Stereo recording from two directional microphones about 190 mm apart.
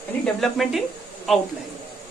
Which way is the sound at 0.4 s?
Centre (ahead or behind).